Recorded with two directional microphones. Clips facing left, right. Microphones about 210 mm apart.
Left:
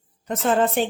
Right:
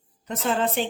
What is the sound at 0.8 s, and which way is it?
Speech, 50° left (ahead or behind).